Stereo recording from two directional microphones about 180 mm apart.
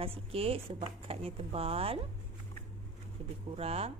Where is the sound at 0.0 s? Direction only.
30° right (ahead or behind).